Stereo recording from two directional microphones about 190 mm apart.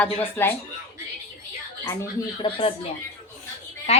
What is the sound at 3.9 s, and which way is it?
Speech, 35° left (ahead or behind).